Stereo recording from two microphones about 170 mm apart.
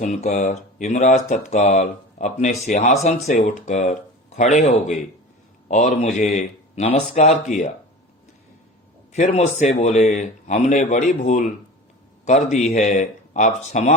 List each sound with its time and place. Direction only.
0.0 s speech: 45° left (ahead or behind)
9.1 s speech: 45° left (ahead or behind)